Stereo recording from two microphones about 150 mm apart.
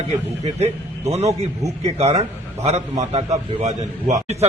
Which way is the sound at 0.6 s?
45° right (ahead or behind).